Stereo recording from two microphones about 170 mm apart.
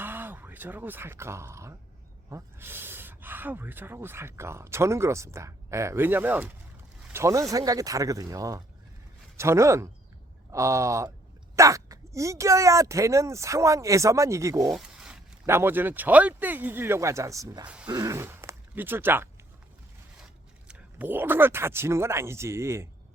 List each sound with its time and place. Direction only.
0.0 s speech: 10° right (ahead or behind)
14.6 s zipper: centre (ahead or behind)
15.4 s speech: 15° right (ahead or behind)
20.7 s speech: 10° right (ahead or behind)